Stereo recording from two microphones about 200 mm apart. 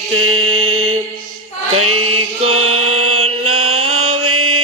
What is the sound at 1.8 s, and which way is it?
Chant, 90° right.